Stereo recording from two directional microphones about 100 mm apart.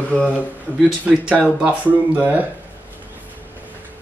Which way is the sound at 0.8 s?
10° right (ahead or behind).